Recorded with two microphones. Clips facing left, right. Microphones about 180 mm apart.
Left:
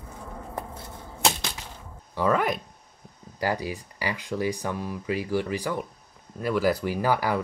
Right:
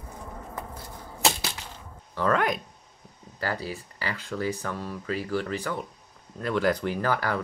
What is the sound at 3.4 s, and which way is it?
Speech, 15° left (ahead or behind).